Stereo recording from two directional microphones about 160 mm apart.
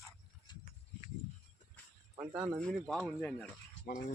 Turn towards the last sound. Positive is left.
turn(degrees=60)  # may be behind; listen again after turning